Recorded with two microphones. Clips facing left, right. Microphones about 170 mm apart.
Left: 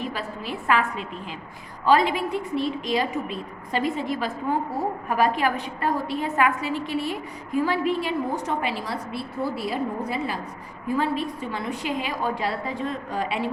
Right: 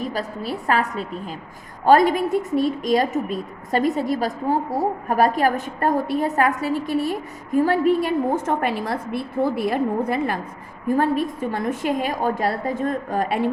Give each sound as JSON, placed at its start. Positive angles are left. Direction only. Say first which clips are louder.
{"t": 0.0, "sound": "a woman's voice", "louder": "right 4 dB", "side_deg": -40}